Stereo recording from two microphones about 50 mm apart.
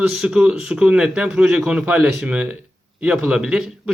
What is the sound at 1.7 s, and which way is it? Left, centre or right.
Speech, right.